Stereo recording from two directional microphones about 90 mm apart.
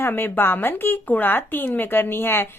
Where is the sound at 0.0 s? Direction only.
20° left (ahead or behind).